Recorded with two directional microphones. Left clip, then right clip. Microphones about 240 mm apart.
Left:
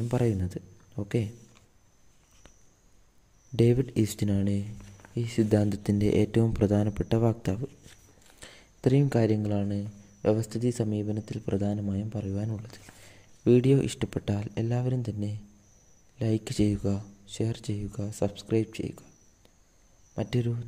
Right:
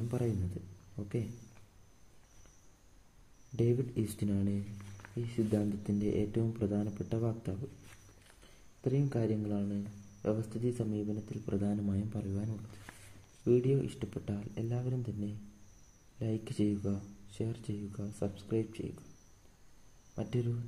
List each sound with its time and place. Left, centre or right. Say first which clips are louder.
0.1 s speech: left 9 dB; left
3.5 s speech: left 8 dB; left
8.8 s speech: left 9 dB; left
13.4 s speech: left 7 dB; left
20.2 s speech: left 6 dB; left